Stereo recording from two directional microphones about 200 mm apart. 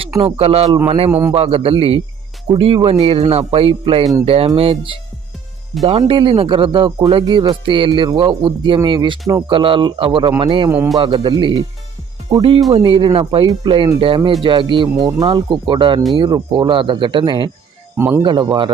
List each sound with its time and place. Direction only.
0.3 s speech: 30° right (ahead or behind)
17.9 s speech: 10° right (ahead or behind)
18.2 s speech: 25° right (ahead or behind)